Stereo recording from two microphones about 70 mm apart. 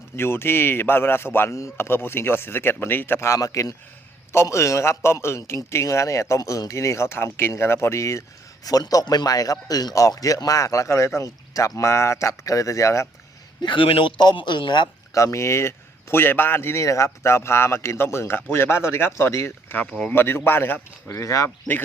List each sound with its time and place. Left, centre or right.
0.2 s speech: left
1.5 s a man's voice: left
1.9 s speech: left
3.2 s a man's voice: left
8.6 s a man's voice: left
13.6 s speech: left
15.1 s speech: left
16.8 s speech: left
19.7 s speech: centre
20.1 s speech: left
21.2 s a man's voice: left